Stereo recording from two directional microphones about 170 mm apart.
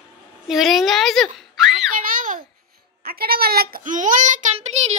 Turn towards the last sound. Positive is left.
turn(degrees=-40)  # may be behind; listen again after turning